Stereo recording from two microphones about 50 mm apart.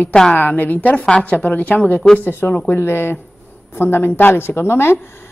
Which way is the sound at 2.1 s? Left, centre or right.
Left.